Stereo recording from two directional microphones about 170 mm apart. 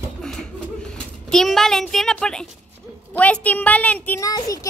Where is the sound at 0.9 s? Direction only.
Centre (ahead or behind).